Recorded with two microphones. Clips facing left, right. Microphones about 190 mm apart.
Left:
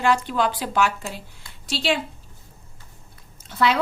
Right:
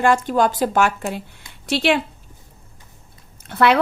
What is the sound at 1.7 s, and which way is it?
Speech, 60° right (ahead or behind).